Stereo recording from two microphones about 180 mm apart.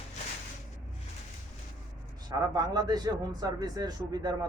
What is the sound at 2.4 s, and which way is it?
A man's voice, 20° right (ahead or behind).